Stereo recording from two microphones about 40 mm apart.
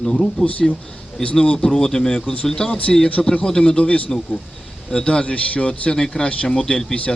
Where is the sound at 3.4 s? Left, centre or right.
Centre.